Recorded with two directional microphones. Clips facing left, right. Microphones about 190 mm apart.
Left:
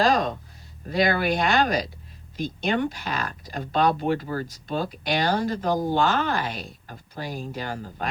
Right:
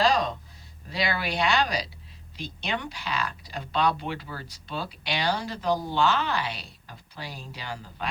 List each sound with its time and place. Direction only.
0.0 s speech: 50° left (ahead or behind)